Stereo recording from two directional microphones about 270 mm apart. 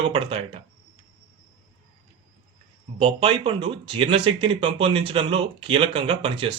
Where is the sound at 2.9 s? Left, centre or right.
Centre.